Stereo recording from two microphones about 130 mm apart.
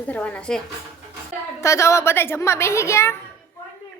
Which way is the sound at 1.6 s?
20° left (ahead or behind).